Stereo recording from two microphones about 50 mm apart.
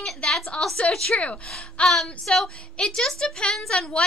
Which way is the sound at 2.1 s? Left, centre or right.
Centre.